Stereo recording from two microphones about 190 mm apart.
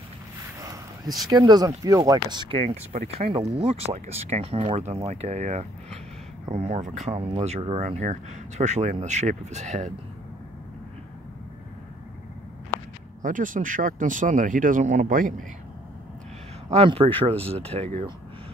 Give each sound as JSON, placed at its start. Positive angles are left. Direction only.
{"t": 0.6, "sound": "a sound", "side_deg": -15}
{"t": 1.2, "sound": "speech", "side_deg": -20}
{"t": 13.2, "sound": "speech", "side_deg": -45}
{"t": 16.8, "sound": "speech", "side_deg": -30}